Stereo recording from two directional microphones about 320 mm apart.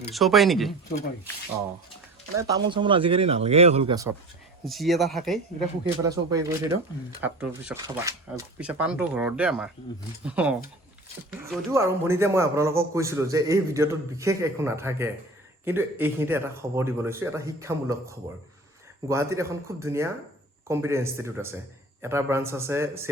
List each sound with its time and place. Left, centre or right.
0.1 s speech: centre
2.6 s a man's voice: centre
4.6 s speech: centre
6.0 s a man's voice: centre